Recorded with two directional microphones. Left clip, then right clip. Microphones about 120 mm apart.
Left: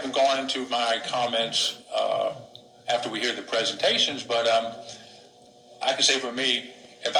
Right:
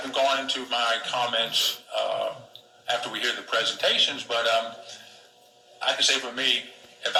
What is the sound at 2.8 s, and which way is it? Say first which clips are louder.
A man's voice: left 1 dB; 35° left (ahead or behind).